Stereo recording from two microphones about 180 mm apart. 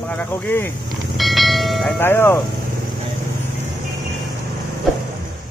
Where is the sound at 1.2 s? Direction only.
Centre (ahead or behind).